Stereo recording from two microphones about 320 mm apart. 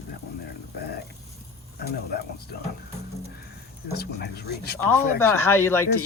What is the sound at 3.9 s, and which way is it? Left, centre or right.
Speech, left.